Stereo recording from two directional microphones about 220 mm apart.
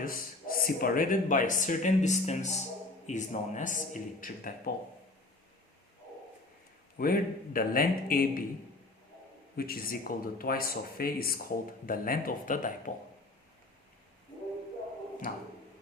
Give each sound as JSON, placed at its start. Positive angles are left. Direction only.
{"t": 0.0, "sound": "speech", "side_deg": 40}
{"t": 7.0, "sound": "speech", "side_deg": 40}
{"t": 9.6, "sound": "speech", "side_deg": 40}